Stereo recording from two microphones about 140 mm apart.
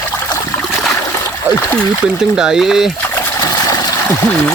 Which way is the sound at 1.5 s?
15° right (ahead or behind).